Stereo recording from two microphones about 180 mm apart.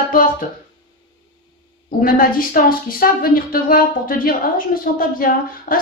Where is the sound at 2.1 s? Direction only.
50° left (ahead or behind).